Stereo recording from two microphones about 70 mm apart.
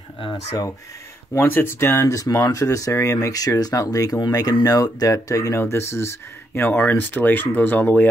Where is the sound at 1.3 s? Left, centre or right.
Left.